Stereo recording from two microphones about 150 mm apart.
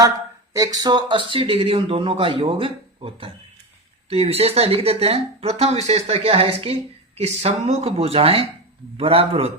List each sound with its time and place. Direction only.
0.5 s speech: 25° right (ahead or behind); by 9.5 s 40° right (ahead or behind)